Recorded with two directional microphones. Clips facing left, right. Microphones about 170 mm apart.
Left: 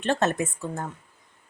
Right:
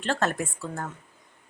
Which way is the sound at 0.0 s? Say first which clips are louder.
Left 3 dB; 20° left (ahead or behind).